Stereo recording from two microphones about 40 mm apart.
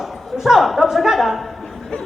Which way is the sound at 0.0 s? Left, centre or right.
Centre.